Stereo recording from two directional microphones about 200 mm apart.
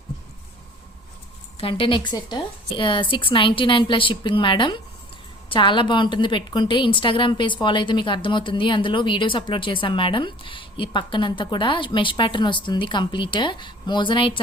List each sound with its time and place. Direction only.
1.5 s a woman's voice: 25° left (ahead or behind)